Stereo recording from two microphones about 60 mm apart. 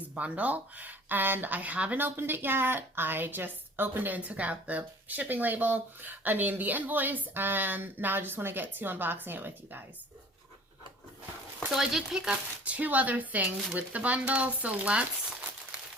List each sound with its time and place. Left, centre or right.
0.1 s speech: right
2.0 s a woman's voice: right
11.7 s speech: centre; by 15.0 s right